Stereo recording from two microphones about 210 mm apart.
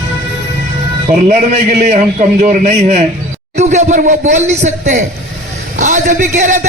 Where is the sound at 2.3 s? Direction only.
35° right (ahead or behind).